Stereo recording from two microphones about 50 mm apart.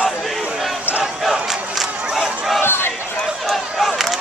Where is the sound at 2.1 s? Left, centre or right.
Centre.